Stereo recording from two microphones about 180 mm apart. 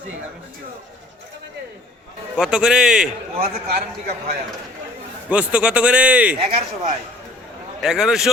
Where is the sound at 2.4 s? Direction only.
5° right (ahead or behind).